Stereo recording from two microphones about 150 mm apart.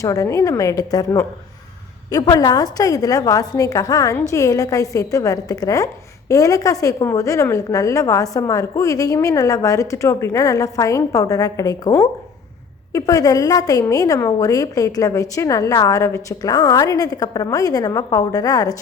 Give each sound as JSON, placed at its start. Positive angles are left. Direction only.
{"t": 0.0, "sound": "a woman's voice", "side_deg": 20}